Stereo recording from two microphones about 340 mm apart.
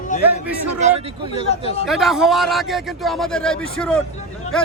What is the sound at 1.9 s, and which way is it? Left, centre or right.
A man's voice, centre.